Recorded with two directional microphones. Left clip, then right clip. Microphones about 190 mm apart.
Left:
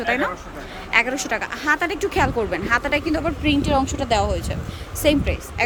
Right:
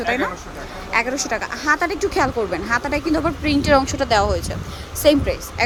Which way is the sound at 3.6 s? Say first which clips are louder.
Right 5 dB; 5° right (ahead or behind).